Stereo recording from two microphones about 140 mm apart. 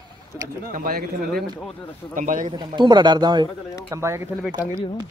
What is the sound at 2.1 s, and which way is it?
Speech, 70° right (ahead or behind).